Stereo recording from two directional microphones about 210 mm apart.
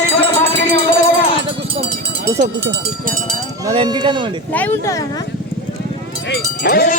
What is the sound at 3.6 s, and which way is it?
Speech, 20° right (ahead or behind).